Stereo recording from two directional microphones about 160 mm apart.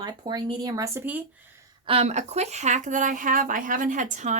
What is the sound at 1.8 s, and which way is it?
A woman's voice, 40° right (ahead or behind).